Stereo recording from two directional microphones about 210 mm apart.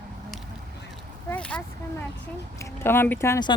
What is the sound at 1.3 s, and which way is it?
Speech, 5° left (ahead or behind).